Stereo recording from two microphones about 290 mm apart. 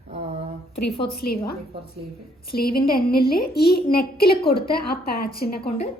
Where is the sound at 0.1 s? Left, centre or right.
Centre.